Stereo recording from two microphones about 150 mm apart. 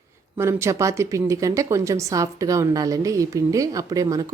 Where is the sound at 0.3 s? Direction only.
20° right (ahead or behind).